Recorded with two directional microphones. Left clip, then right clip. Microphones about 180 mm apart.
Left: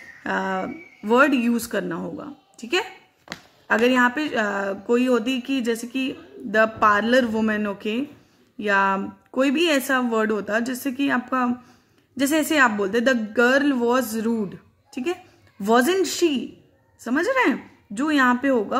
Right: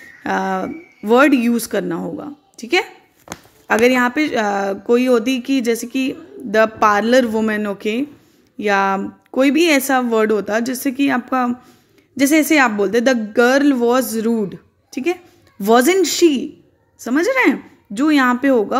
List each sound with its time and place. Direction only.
0.2 s speech: 20° right (ahead or behind)